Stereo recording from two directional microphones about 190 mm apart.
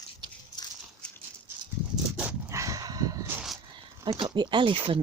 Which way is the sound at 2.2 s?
10° right (ahead or behind).